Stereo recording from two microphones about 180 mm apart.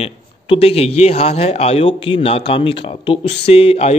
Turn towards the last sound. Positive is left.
turn(degrees=35)  # may be behind; listen again after turning